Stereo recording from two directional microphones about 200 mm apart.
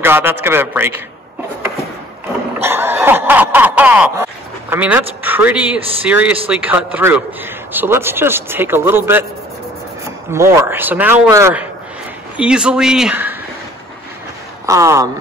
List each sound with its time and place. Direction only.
0.0 s a man's voice: 10° right (ahead or behind)
2.6 s a sound: 10° right (ahead or behind)
6.0 s a man's voice: 5° right (ahead or behind)
10.3 s a man's voice: 10° right (ahead or behind)
14.7 s a man's voice: 15° right (ahead or behind)